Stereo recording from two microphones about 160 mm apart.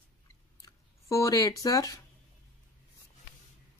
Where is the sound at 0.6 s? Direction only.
20° left (ahead or behind).